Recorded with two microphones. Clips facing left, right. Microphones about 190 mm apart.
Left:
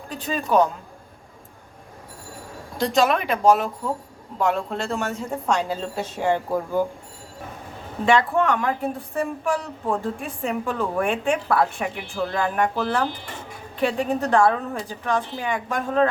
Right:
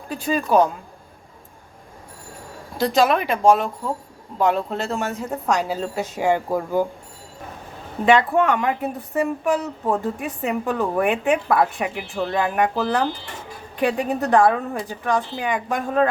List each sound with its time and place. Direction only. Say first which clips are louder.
0.1 s a woman's voice: right 3 dB; 10° right (ahead or behind)
2.7 s a woman's voice: right 2 dB; 5° right (ahead or behind)
8.0 s a woman's voice: right 3 dB; 15° right (ahead or behind)
13.7 s a woman's voice: right 1 dB; 15° right (ahead or behind)